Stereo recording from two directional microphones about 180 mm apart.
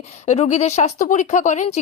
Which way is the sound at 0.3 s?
40° left (ahead or behind).